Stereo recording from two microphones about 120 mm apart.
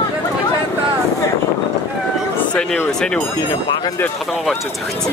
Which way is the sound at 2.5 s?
10° left (ahead or behind).